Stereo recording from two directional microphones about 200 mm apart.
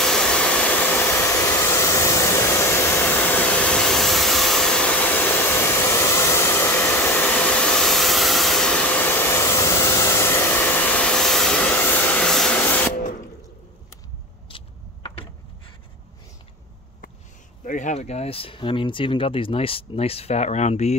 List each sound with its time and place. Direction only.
0.0 s hair dryer: 5° left (ahead or behind)
14.5 s vehicle: 25° left (ahead or behind)
17.6 s speech: 35° left (ahead or behind)